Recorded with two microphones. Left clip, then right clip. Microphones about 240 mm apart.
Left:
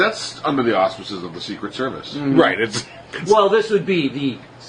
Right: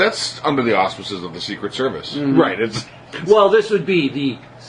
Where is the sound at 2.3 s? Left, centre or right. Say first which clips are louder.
Left 1 dB; left.